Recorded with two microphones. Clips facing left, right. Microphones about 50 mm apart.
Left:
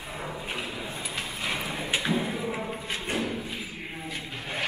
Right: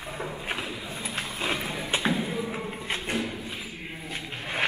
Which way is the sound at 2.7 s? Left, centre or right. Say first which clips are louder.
Right 1 dB; right.